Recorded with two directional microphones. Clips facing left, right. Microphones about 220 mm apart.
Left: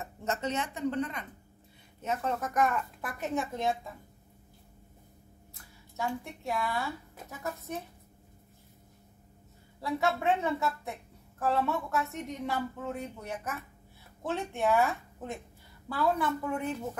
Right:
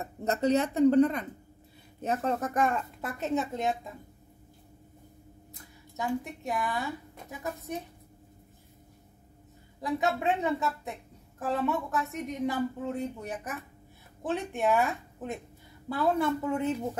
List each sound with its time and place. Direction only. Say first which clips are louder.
0.0 s a woman's voice: right 6 dB; 35° right (ahead or behind); by 3.7 s 20° right (ahead or behind)
5.5 s speech: right 5 dB; 15° right (ahead or behind)
9.8 s a woman's voice: right 1 dB; 15° right (ahead or behind)